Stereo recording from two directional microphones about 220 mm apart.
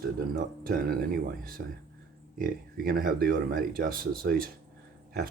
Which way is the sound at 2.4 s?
40° right (ahead or behind).